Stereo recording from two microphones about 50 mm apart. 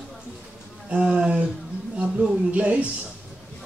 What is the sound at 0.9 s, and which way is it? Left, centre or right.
Speech, centre.